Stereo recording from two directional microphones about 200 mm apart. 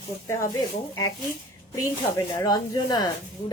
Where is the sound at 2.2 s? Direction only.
20° left (ahead or behind).